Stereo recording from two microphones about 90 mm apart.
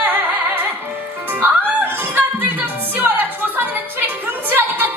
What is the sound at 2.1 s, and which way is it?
Music, 20° right (ahead or behind).